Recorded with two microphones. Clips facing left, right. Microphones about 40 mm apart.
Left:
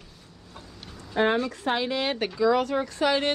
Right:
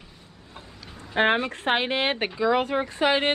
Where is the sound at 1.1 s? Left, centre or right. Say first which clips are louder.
Right 2 dB; right.